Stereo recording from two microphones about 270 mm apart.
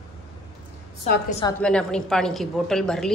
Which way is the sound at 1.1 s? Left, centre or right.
Left.